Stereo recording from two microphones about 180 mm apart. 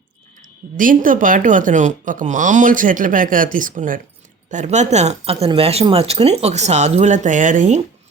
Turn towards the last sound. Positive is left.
turn(degrees=-45)  # may be behind; listen again after turning